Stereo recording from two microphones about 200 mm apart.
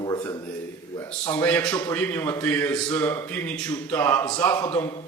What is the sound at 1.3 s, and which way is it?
A man's voice, 10° left (ahead or behind).